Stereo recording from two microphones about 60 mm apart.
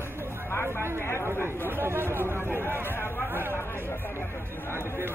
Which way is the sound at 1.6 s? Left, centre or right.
Right.